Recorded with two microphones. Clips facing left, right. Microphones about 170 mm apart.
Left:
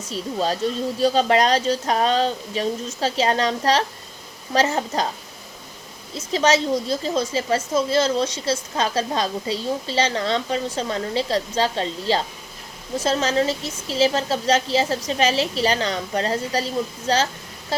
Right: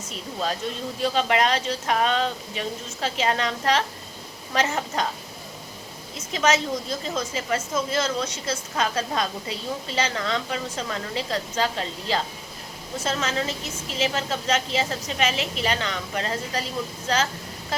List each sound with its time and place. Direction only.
0.1 s a woman's voice: 35° left (ahead or behind)
6.1 s a woman's voice: 30° left (ahead or behind)